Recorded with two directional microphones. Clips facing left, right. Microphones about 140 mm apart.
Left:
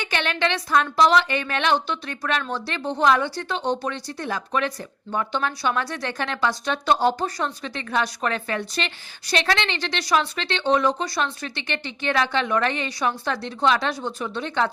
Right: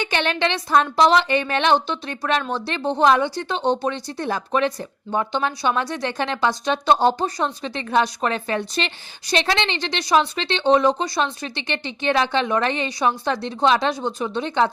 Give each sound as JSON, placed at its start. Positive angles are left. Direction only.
{"t": 0.0, "sound": "speech", "side_deg": -25}